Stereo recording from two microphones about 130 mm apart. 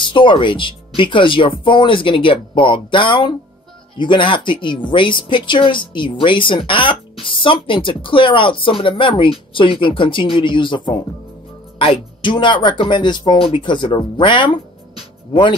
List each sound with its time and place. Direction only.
0.0 s speech: 40° left (ahead or behind)
11.8 s speech: 40° left (ahead or behind)